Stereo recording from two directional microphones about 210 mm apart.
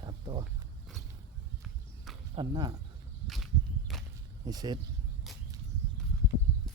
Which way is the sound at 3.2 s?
Centre (ahead or behind).